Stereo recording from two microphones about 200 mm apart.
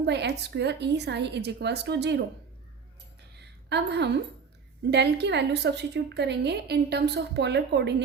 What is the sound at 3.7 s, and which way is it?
A woman's voice, 60° right (ahead or behind).